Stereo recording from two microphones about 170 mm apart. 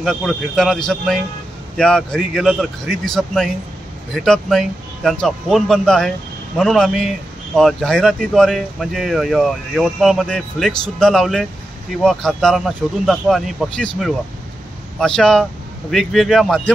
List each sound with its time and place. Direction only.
0.0 s speech: centre (ahead or behind)